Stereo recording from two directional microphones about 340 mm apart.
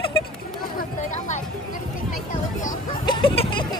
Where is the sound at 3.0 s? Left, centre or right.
Centre.